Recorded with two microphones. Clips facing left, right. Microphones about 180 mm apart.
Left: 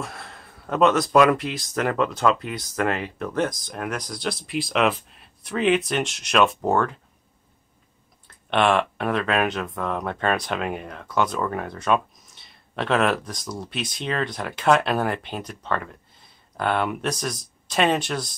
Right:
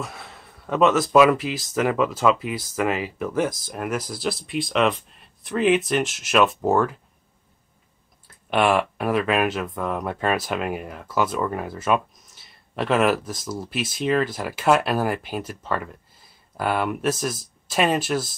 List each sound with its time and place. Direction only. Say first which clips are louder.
0.0 s speech: even; centre (ahead or behind)
8.5 s speech: even; 5° right (ahead or behind)